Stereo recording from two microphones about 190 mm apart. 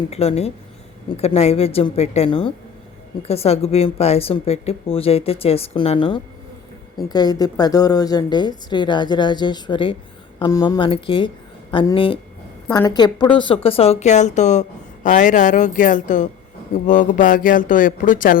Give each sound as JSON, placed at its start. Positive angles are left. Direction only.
{"t": 0.1, "sound": "a woman's voice", "side_deg": 35}
{"t": 12.6, "sound": "a woman's voice", "side_deg": 15}